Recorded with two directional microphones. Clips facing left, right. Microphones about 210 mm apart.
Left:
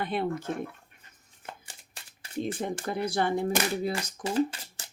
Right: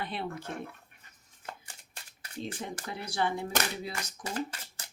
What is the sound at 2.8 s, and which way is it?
Speech, 50° left (ahead or behind).